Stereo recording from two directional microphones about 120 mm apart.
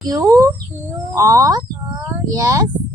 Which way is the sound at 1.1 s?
25° right (ahead or behind).